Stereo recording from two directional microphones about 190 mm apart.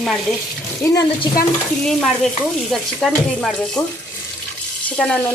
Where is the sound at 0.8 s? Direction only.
20° left (ahead or behind).